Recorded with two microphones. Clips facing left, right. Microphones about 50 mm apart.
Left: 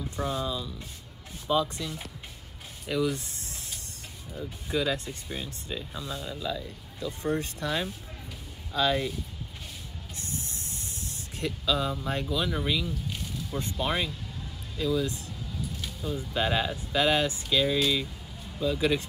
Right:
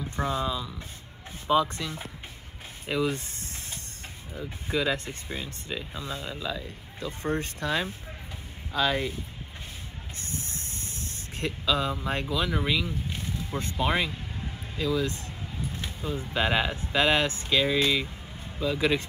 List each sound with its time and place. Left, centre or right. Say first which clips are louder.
0.1 s speech: right 3 dB; right
0.5 s speech: right 2 dB; centre
1.8 s speech: right 1 dB; right
2.9 s music: even; right
4.6 s speech: right 1 dB; right
10.1 s spray: right 1 dB; right
11.6 s speech: right 1 dB; right
12.4 s speech: right 2 dB; centre
12.8 s boat: right 1 dB; right
13.7 s a sound: right 4 dB; right
16.7 s speech: right 1 dB; right